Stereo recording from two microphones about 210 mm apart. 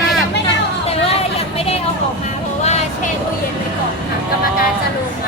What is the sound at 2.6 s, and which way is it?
Music, 30° left (ahead or behind).